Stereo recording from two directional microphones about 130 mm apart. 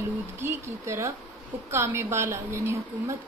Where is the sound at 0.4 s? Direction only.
20° right (ahead or behind).